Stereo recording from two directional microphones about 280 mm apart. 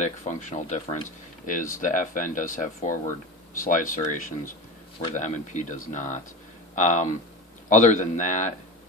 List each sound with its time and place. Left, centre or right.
0.0 s speech: left